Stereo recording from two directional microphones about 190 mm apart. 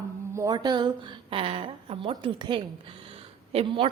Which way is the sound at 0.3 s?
20° right (ahead or behind).